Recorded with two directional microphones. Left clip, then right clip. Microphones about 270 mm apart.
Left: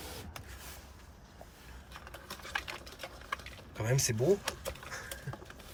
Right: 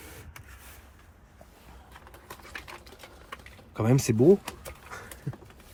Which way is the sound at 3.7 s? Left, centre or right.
Centre.